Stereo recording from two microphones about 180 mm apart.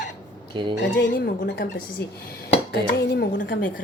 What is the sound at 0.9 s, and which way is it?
A woman's voice, 65° left (ahead or behind).